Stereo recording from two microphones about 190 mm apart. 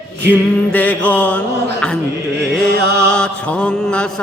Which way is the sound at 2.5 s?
Centre (ahead or behind).